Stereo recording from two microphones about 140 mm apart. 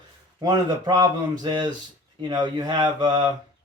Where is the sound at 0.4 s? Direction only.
30° right (ahead or behind).